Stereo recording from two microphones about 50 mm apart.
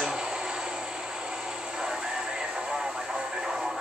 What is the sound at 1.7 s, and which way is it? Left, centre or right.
Vehicle, centre.